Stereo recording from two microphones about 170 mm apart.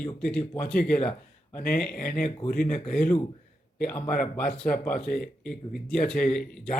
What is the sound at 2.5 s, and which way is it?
Speech, 60° left (ahead or behind).